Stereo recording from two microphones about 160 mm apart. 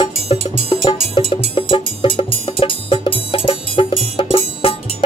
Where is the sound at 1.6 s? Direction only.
35° left (ahead or behind).